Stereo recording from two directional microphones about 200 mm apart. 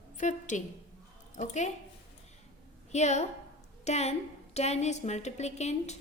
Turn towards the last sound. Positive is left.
turn(degrees=35)  # may be behind; listen again after turning